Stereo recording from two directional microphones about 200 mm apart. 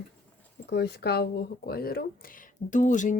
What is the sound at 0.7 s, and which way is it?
Speech, 55° left (ahead or behind).